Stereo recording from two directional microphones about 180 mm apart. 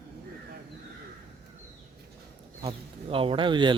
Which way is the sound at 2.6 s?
30° right (ahead or behind).